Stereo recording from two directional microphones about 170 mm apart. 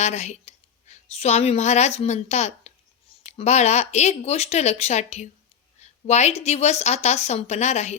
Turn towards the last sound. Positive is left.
turn(degrees=40)  # may be behind; listen again after turning